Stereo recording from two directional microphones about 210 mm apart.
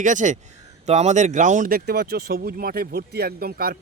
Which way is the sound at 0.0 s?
35° right (ahead or behind).